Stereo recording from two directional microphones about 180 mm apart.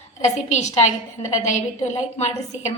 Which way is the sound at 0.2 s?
40° left (ahead or behind).